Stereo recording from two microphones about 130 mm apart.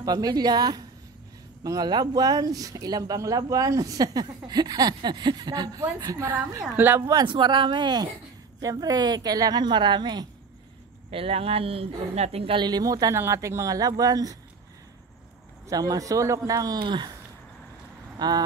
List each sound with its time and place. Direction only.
0.0 s a woman's voice: 30° right (ahead or behind)
11.1 s speech: 45° right (ahead or behind); by 14.3 s 25° right (ahead or behind)
15.7 s speech: 30° right (ahead or behind)
18.2 s a woman's voice: 30° right (ahead or behind)